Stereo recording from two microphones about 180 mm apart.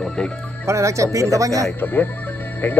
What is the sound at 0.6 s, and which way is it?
Speech, 15° right (ahead or behind).